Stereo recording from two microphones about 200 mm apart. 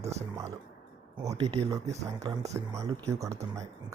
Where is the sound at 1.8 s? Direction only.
35° right (ahead or behind).